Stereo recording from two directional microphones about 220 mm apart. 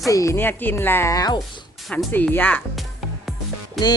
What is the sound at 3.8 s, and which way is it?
Music, centre (ahead or behind).